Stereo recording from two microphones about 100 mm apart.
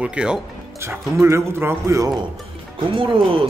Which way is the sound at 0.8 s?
25° right (ahead or behind).